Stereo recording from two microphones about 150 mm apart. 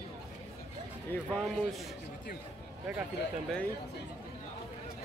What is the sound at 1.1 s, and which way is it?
Speech, 5° left (ahead or behind).